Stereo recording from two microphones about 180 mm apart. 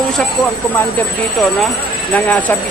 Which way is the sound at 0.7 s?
5° left (ahead or behind).